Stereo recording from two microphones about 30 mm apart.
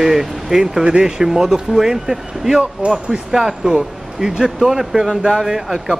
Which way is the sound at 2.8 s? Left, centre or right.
Right.